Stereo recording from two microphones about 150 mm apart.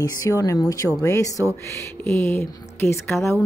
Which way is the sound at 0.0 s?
25° left (ahead or behind).